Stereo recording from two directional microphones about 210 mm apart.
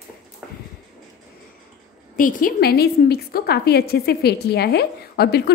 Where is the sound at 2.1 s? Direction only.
40° left (ahead or behind).